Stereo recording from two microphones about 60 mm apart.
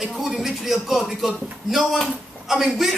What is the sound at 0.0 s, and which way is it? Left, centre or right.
Speech, centre.